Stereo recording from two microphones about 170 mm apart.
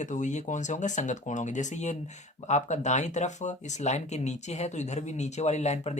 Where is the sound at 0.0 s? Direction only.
45° left (ahead or behind).